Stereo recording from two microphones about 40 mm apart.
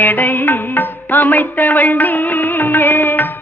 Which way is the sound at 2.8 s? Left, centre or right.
Left.